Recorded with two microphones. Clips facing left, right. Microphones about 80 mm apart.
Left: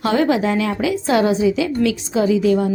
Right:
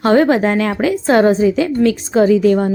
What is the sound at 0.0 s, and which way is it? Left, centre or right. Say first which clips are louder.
A woman's voice: right 5 dB; right.